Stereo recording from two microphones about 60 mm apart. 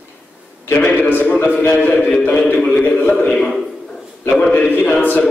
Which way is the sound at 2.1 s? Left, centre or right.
Centre.